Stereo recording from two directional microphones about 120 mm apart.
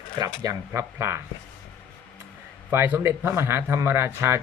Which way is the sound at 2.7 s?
20° right (ahead or behind).